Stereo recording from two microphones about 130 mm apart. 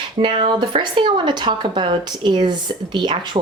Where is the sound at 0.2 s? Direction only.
40° right (ahead or behind).